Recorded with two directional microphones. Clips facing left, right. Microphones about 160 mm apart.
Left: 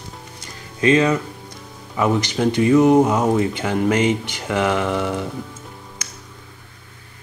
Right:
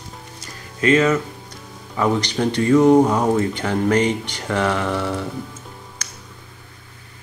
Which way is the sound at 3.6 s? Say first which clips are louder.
Even; 15° left (ahead or behind).